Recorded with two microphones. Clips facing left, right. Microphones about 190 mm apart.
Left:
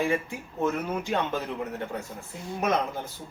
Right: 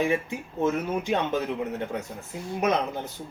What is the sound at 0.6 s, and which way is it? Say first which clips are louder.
Speech: right 2 dB; 20° right (ahead or behind).